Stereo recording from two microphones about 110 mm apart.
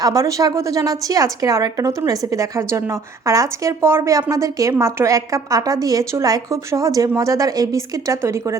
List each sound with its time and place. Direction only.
0.0 s a woman's voice: 30° right (ahead or behind)